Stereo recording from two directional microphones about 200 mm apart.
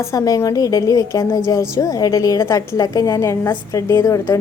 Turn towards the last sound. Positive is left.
turn(degrees=15)  # may be behind; listen again after turning